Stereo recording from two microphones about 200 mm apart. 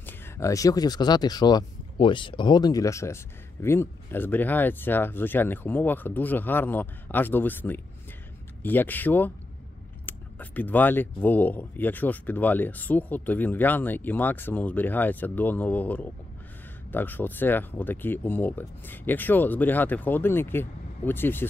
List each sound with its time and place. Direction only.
0.0 s speech: 15° left (ahead or behind)